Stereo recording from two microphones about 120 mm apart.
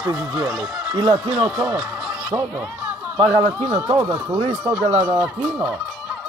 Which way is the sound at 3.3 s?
40° right (ahead or behind).